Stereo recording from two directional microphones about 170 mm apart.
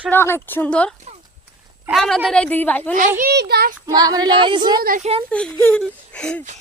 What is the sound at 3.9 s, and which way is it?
A woman's voice, 25° right (ahead or behind).